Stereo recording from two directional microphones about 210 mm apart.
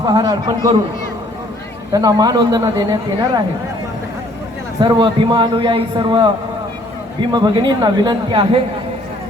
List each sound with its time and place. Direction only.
0.0 s a man's voice: 20° right (ahead or behind)
1.9 s a man's voice: 15° right (ahead or behind)
4.8 s a man's voice: 20° right (ahead or behind)